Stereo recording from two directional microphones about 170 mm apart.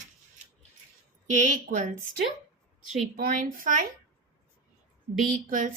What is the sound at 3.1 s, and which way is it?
Speech, 55° right (ahead or behind).